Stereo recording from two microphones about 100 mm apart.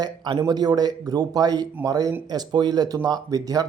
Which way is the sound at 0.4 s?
45° right (ahead or behind).